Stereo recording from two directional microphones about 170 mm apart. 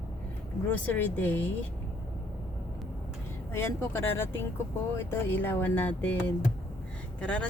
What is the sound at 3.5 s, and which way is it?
Speech, 15° left (ahead or behind).